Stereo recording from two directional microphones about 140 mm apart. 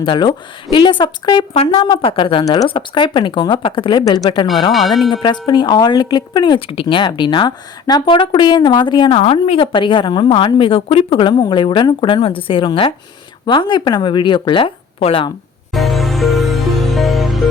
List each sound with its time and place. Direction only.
0.0 s speech: 35° left (ahead or behind)
2.4 s speech: 25° left (ahead or behind)
4.7 s speech: centre (ahead or behind)
5.2 s speech: 35° left (ahead or behind)
15.7 s music: centre (ahead or behind)